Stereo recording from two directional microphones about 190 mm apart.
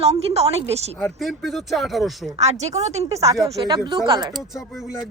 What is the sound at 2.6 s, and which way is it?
Speech, 35° right (ahead or behind).